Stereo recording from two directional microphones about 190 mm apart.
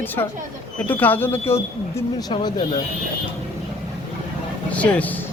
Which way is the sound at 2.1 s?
20° left (ahead or behind).